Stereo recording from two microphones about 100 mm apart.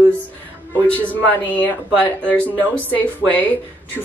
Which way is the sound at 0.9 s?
15° left (ahead or behind).